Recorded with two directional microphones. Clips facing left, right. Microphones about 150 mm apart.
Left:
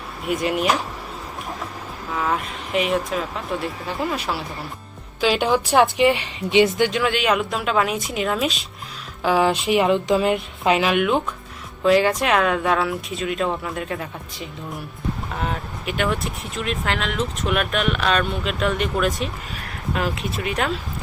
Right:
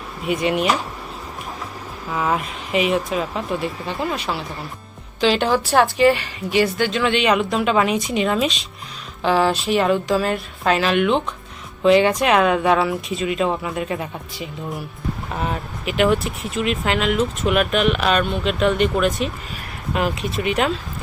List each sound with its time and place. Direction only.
0.3 s speech: centre (ahead or behind)
2.1 s speech: 5° right (ahead or behind)